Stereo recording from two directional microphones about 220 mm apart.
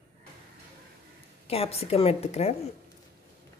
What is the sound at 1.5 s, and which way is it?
A woman's voice, 25° left (ahead or behind).